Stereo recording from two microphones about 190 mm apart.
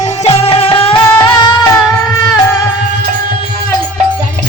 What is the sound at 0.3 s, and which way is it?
Music, 30° left (ahead or behind).